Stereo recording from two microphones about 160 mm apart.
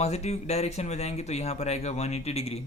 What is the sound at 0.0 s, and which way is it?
Speech, 40° left (ahead or behind).